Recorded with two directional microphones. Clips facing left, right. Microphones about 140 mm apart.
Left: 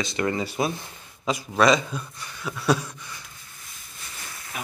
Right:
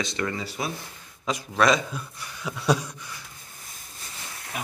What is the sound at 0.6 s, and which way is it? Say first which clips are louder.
Speech: left 6 dB; 25° left (ahead or behind).